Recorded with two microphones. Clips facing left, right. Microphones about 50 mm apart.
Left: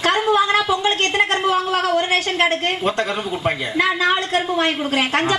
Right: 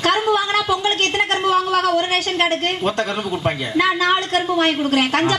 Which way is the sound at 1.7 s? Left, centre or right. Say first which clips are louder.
Right 1 dB; left.